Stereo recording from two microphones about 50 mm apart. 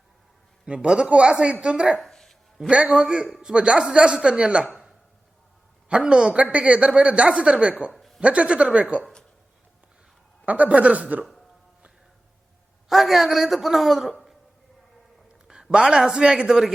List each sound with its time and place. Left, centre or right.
0.7 s a woman's voice: right
2.0 s a sound: centre
2.6 s a woman's voice: right
5.9 s a woman's voice: centre
7.9 s a sound: centre
8.2 s a woman's voice: right
10.4 s a woman's voice: right
12.9 s a man's voice: centre
15.4 s a man's voice: centre